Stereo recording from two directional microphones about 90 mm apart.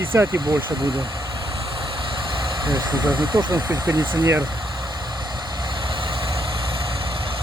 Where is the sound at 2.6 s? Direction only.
55° right (ahead or behind).